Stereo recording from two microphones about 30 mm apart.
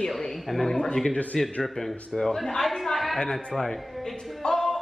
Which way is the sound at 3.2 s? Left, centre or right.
Centre.